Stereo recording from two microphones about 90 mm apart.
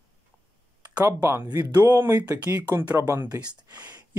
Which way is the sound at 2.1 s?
45° right (ahead or behind).